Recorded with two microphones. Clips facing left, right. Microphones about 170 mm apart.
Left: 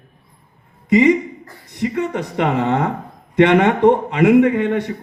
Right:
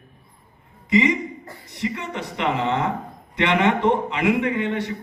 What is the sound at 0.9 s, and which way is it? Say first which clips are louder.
A man's voice: left 6 dB; 55° left (ahead or behind).